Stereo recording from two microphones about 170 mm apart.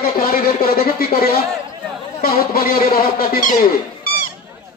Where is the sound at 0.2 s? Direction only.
60° left (ahead or behind).